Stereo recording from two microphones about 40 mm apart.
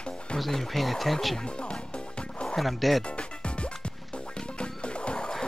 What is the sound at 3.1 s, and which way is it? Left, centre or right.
Music, left.